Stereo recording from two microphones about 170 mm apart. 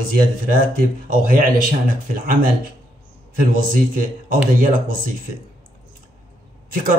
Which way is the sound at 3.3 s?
55° right (ahead or behind).